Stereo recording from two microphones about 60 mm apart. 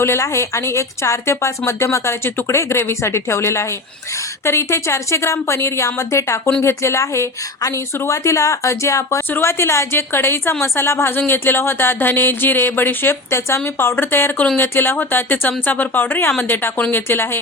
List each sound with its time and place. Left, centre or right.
0.0 s a woman's voice: left